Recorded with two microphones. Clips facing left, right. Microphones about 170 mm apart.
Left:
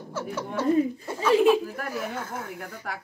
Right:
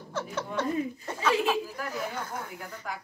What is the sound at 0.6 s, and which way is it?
Speech, 10° left (ahead or behind).